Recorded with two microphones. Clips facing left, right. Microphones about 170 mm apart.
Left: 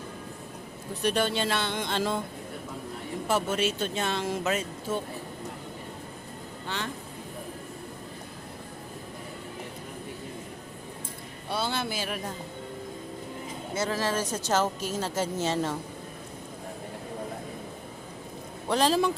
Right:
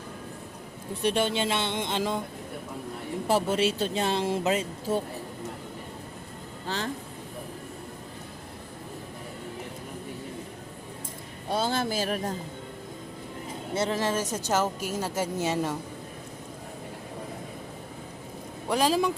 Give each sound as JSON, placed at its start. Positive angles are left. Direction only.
{"t": 1.0, "sound": "speech", "side_deg": -25}
{"t": 3.2, "sound": "speech", "side_deg": -35}
{"t": 6.7, "sound": "speech", "side_deg": -35}
{"t": 11.4, "sound": "speech", "side_deg": -40}
{"t": 13.7, "sound": "speech", "side_deg": -25}
{"t": 18.7, "sound": "speech", "side_deg": -10}